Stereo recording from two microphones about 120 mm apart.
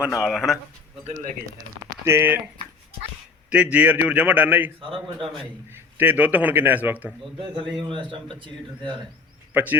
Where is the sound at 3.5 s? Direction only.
10° right (ahead or behind).